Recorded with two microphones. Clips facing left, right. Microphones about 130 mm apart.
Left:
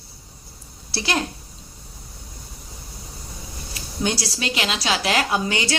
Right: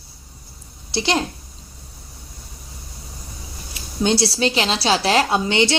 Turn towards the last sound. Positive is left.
turn(degrees=-25)  # may be behind; listen again after turning